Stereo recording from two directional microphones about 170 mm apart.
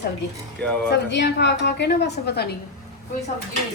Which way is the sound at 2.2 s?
70° left (ahead or behind).